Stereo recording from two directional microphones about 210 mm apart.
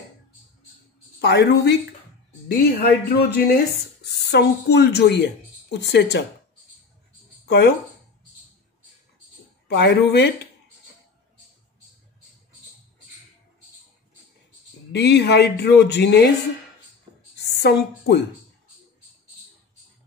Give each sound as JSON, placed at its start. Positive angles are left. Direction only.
{"t": 1.2, "sound": "a woman's voice", "side_deg": 55}
{"t": 7.4, "sound": "speech", "side_deg": 55}
{"t": 9.7, "sound": "speech", "side_deg": 55}
{"t": 14.9, "sound": "speech", "side_deg": 55}
{"t": 17.1, "sound": "a sound", "side_deg": -20}
{"t": 17.4, "sound": "a woman's voice", "side_deg": 50}